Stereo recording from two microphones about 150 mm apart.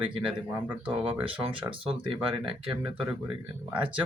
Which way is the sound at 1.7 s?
35° right (ahead or behind).